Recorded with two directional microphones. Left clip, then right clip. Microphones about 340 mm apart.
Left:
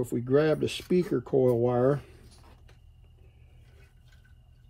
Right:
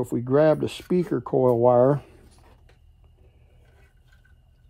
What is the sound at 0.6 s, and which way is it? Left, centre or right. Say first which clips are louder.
Speech: right 2 dB; centre.